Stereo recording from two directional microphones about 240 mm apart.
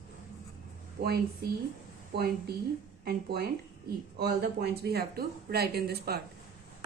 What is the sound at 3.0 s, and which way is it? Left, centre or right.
A woman's voice, right.